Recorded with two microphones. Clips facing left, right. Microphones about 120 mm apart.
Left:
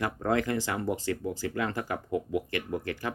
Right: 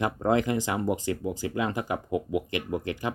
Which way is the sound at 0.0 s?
20° right (ahead or behind).